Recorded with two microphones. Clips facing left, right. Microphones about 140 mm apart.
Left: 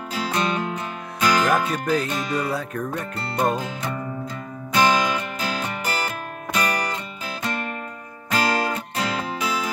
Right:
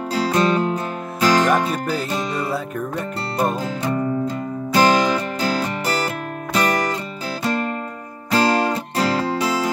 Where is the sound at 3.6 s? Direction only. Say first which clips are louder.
Right 6 dB; 30° right (ahead or behind).